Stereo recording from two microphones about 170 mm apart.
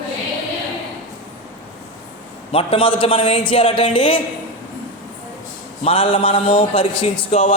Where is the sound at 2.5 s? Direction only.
35° left (ahead or behind).